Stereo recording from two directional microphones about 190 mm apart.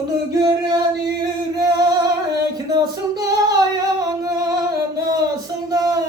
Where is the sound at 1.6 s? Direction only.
20° right (ahead or behind).